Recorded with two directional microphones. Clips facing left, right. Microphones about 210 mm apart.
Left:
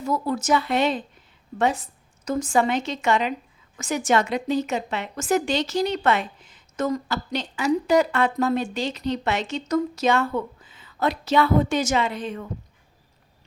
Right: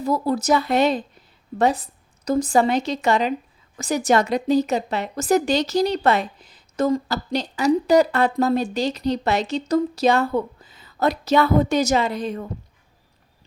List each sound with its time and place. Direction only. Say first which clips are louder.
0.0 s a woman's voice: right 3 dB; 35° right (ahead or behind)